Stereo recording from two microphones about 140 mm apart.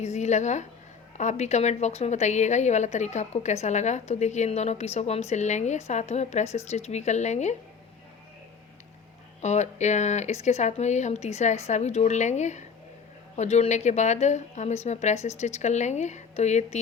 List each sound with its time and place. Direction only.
0.0 s a woman's voice: 55° left (ahead or behind)
9.4 s a woman's voice: 55° left (ahead or behind)